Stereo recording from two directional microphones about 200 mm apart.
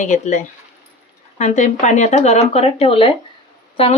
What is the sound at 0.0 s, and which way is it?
A woman's voice, 40° left (ahead or behind).